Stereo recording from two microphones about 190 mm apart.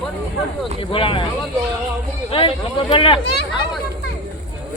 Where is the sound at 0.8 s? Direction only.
30° left (ahead or behind).